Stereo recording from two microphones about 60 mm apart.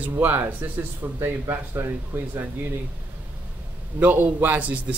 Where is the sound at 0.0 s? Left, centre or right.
Right.